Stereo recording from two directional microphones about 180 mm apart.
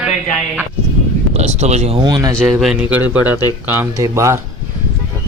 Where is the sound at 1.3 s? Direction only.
40° right (ahead or behind).